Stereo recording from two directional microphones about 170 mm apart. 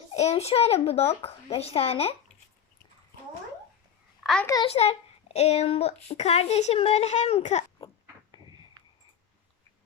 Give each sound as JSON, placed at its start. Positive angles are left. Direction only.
{"t": 0.1, "sound": "a child's voice", "side_deg": 40}
{"t": 4.2, "sound": "a sound", "side_deg": 0}
{"t": 4.6, "sound": "a child's voice", "side_deg": 35}